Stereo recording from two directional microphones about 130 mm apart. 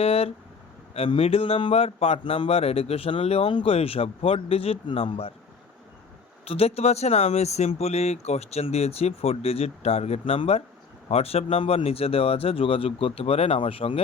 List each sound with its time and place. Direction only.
0.0 s speech: 50° left (ahead or behind)
6.5 s speech: 50° left (ahead or behind)